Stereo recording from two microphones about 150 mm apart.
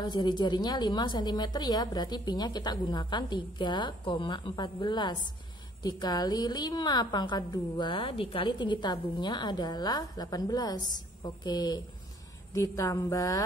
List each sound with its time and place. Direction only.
0.0 s a woman's voice: 30° left (ahead or behind)